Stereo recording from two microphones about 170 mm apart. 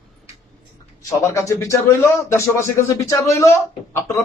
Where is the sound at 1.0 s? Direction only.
15° left (ahead or behind).